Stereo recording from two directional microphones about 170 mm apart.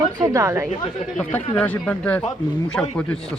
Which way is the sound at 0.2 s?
20° right (ahead or behind).